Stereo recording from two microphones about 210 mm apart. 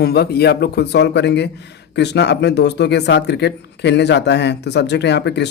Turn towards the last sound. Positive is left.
turn(degrees=55)  # may be behind; listen again after turning